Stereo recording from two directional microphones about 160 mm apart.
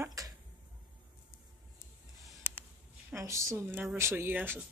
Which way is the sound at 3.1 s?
20° right (ahead or behind).